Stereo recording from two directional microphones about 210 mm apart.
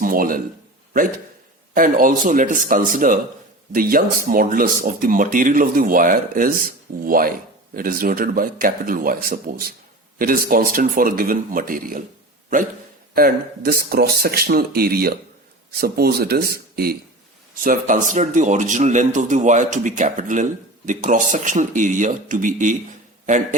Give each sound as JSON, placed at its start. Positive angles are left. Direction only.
{"t": 0.0, "sound": "a man's voice", "side_deg": -40}
{"t": 1.7, "sound": "a man's voice", "side_deg": -40}
{"t": 13.1, "sound": "a man's voice", "side_deg": -45}